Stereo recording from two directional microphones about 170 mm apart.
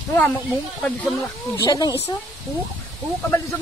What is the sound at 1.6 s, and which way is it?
Speech, 20° left (ahead or behind).